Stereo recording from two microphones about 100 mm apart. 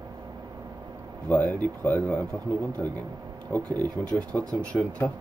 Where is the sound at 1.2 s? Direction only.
15° left (ahead or behind).